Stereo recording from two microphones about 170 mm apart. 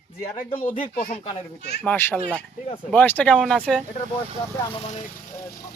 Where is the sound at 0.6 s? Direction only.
45° left (ahead or behind).